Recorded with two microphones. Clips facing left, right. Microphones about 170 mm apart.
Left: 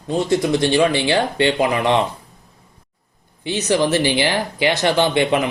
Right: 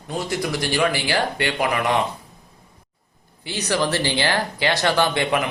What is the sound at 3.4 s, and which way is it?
Speech, 20° left (ahead or behind).